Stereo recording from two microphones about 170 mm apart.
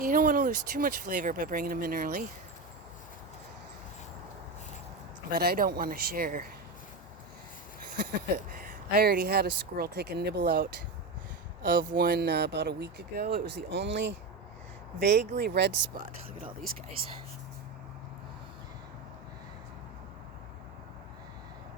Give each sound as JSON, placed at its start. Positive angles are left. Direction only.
{"t": 0.0, "sound": "speech", "side_deg": -55}
{"t": 5.3, "sound": "speech", "side_deg": -65}
{"t": 8.5, "sound": "speech", "side_deg": -55}
{"t": 17.0, "sound": "speech", "side_deg": -60}